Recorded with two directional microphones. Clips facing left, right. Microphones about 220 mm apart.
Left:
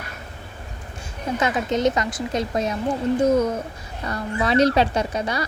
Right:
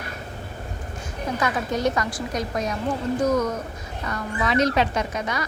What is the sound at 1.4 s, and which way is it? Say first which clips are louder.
Speech: left 3 dB; 20° left (ahead or behind).